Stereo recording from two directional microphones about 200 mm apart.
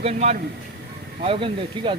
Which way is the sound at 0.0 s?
35° right (ahead or behind).